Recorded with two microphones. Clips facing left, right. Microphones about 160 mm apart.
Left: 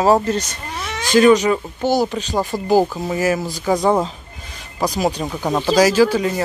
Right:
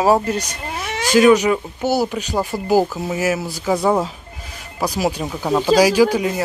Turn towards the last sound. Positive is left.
turn(degrees=-10)  # may be behind; listen again after turning